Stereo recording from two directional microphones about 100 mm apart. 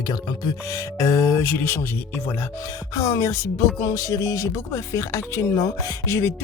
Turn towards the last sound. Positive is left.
turn(degrees=30)  # may be behind; listen again after turning